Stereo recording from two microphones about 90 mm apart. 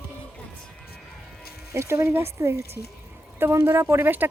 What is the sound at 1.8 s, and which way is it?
Speech, 30° right (ahead or behind).